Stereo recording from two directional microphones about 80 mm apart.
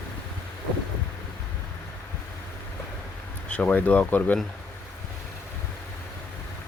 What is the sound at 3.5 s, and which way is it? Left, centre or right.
Speech, centre.